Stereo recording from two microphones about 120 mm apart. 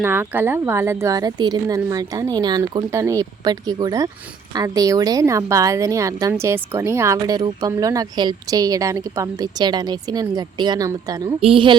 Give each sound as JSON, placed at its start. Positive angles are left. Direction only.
{"t": 0.0, "sound": "a woman's voice", "side_deg": -20}
{"t": 2.9, "sound": "a woman's voice", "side_deg": -25}
{"t": 11.3, "sound": "a woman's voice", "side_deg": -50}